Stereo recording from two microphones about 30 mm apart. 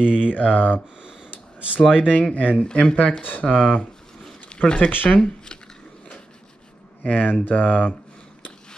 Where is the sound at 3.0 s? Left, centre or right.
Left.